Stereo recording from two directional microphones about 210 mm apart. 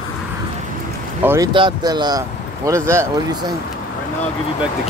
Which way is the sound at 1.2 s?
15° right (ahead or behind).